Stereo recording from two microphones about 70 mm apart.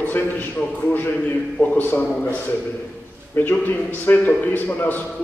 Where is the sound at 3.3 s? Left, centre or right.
Left.